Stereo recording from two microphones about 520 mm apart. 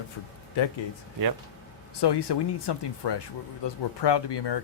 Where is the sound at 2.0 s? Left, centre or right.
Left.